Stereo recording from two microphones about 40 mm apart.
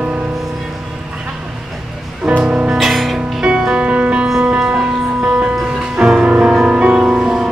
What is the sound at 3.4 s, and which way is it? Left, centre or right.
Music, centre.